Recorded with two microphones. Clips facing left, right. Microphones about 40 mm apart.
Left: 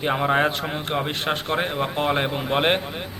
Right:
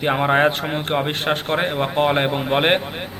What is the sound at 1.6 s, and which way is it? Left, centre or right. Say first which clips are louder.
A man's voice: right 4 dB; right.